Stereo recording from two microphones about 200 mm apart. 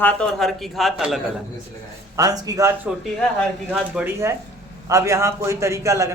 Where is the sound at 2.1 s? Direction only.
20° right (ahead or behind).